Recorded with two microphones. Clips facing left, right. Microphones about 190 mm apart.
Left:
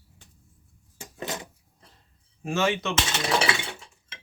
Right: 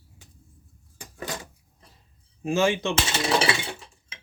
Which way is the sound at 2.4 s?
25° right (ahead or behind).